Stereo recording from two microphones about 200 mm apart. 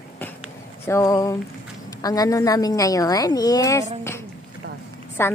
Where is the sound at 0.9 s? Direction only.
15° left (ahead or behind).